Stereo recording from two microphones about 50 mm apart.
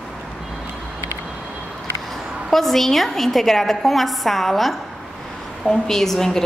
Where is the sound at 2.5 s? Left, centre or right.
Centre.